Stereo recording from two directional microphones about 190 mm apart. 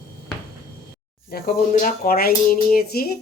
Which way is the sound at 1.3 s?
45° left (ahead or behind).